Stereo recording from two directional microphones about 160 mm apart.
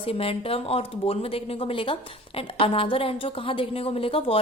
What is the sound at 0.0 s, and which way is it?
A woman's voice, 35° left (ahead or behind).